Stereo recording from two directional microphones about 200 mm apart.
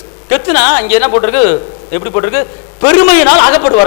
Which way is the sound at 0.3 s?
15° left (ahead or behind).